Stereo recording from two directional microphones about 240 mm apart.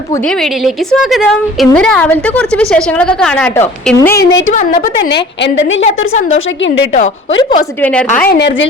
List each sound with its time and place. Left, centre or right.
0.6 s a woman's voice: centre
4.5 s a woman's voice: left
7.8 s a woman's voice: centre
8.2 s a woman's voice: left